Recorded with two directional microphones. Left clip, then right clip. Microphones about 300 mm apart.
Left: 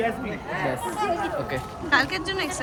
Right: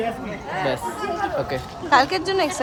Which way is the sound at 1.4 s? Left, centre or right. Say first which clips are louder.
Right 4 dB; centre.